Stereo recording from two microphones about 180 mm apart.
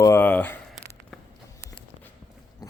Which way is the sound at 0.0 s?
15° left (ahead or behind).